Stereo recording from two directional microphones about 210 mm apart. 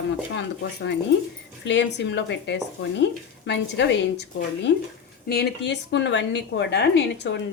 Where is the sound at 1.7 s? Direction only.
55° left (ahead or behind).